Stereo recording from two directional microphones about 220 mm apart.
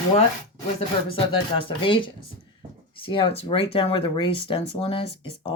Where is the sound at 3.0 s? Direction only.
25° left (ahead or behind).